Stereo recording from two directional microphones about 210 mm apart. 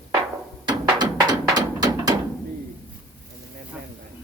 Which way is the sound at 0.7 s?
20° right (ahead or behind).